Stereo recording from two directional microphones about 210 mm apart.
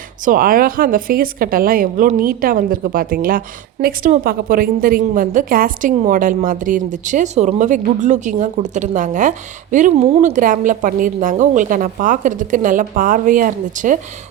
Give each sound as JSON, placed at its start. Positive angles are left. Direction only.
{"t": 0.3, "sound": "a woman's voice", "side_deg": -40}